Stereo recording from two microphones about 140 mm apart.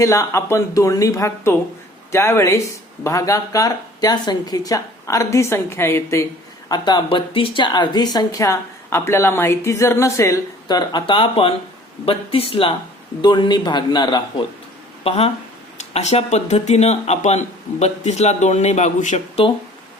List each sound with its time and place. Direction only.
0.0 s speech: 25° left (ahead or behind)
6.7 s a man's voice: 30° left (ahead or behind)
15.0 s speech: 45° left (ahead or behind)